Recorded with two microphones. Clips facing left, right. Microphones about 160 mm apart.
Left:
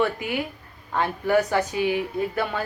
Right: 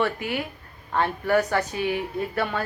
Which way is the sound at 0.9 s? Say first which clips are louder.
Left 1 dB; 10° left (ahead or behind).